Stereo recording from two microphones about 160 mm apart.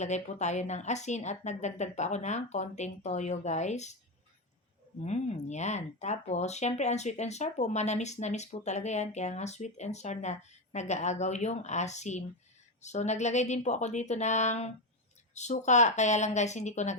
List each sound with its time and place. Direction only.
0.0 s speech: 45° left (ahead or behind)
4.9 s speech: 45° left (ahead or behind)